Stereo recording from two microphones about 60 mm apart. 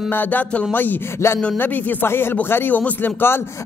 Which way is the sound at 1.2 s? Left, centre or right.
Left.